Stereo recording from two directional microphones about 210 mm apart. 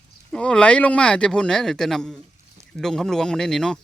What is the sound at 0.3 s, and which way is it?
Speech, 5° left (ahead or behind).